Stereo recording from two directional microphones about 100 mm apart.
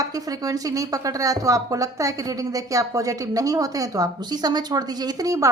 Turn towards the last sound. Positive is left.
turn(degrees=-35)  # may be behind; listen again after turning